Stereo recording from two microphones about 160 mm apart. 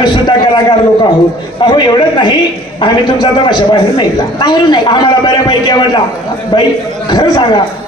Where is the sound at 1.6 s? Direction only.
30° left (ahead or behind).